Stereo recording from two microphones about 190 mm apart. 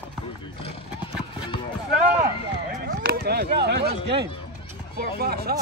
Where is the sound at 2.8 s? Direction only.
55° right (ahead or behind).